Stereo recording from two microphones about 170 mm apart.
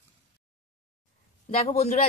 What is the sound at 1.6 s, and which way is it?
Speech, 40° left (ahead or behind).